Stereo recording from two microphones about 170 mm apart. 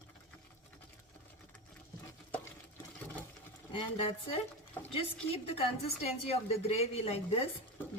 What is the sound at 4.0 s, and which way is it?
A woman's voice, 30° left (ahead or behind).